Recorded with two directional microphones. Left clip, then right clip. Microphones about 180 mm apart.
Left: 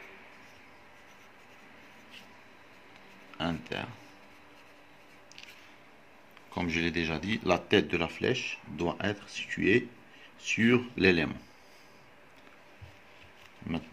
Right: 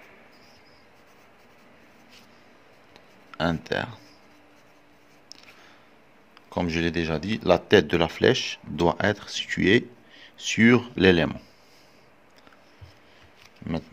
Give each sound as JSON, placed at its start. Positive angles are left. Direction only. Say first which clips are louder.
{"t": 3.3, "sound": "speech", "louder": "right 8 dB", "side_deg": -60}
{"t": 6.5, "sound": "speech", "louder": "right 5 dB", "side_deg": -55}